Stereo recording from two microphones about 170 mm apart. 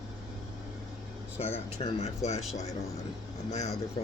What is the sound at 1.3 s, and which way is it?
Speech, 40° left (ahead or behind).